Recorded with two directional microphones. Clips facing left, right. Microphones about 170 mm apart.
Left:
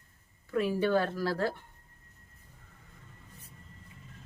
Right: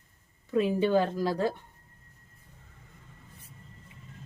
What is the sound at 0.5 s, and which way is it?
Speech, 20° right (ahead or behind).